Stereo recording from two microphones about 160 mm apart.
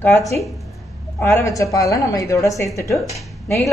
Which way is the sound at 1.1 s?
15° left (ahead or behind).